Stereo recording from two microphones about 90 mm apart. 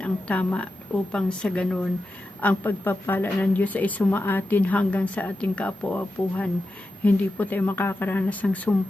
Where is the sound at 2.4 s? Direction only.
20° left (ahead or behind).